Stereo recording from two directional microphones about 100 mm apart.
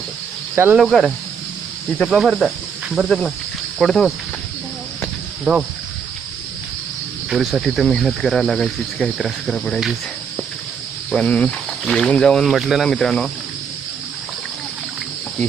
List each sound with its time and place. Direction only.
0.5 s speech: 20° right (ahead or behind)
0.8 s speech: centre (ahead or behind)
5.5 s speech: centre (ahead or behind)
7.3 s speech: 5° right (ahead or behind)
11.1 s cricket: 10° left (ahead or behind)
11.9 s speech: 5° left (ahead or behind)